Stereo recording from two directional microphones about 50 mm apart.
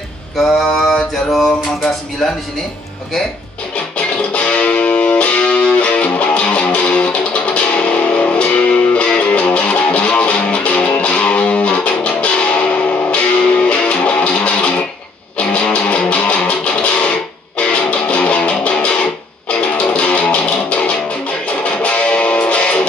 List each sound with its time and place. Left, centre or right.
0.9 s mantra: centre
4.3 s music: left